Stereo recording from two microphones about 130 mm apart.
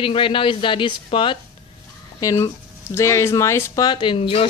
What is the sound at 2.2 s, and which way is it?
Speech, 25° left (ahead or behind).